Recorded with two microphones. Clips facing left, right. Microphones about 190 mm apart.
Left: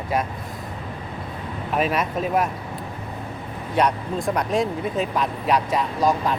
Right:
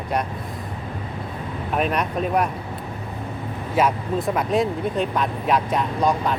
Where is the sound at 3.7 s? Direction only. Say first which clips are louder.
Right 1 dB; 5° right (ahead or behind).